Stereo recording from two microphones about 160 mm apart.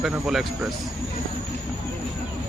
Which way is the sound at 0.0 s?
5° right (ahead or behind).